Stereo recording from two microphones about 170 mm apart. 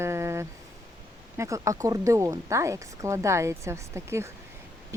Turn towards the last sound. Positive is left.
turn(degrees=-15)  # may be behind; listen again after turning